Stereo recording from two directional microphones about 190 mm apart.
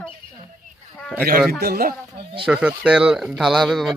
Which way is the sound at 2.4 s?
5° right (ahead or behind).